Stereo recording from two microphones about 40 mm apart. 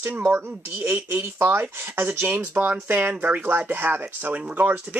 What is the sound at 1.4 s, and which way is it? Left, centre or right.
Speech, right.